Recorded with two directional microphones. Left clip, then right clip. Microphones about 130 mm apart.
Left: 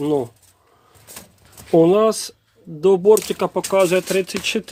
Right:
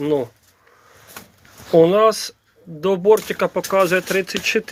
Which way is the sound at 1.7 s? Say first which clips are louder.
Right 1 dB; 35° left (ahead or behind).